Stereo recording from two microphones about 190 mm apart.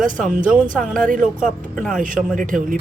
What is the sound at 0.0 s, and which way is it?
Speech, 45° right (ahead or behind).